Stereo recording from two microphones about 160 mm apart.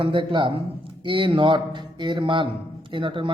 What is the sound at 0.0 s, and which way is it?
Speech, 35° right (ahead or behind).